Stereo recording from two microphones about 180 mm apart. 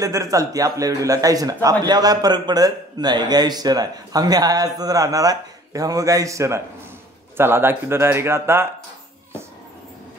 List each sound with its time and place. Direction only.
0.0 s a man's voice: 20° right (ahead or behind)